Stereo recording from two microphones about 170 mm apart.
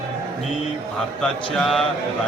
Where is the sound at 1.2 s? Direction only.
Centre (ahead or behind).